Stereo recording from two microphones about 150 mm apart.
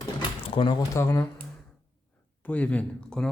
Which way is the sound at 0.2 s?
35° left (ahead or behind).